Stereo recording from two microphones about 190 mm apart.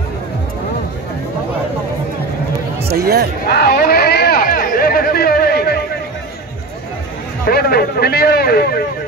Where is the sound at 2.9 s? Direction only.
55° right (ahead or behind).